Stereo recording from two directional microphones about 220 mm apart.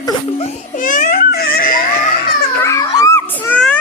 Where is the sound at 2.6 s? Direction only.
15° left (ahead or behind).